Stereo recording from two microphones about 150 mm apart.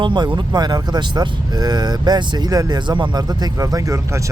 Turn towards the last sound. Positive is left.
turn(degrees=-20)  # may be behind; listen again after turning